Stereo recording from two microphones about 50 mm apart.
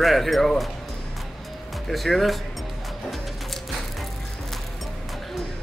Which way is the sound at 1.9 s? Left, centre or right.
Centre.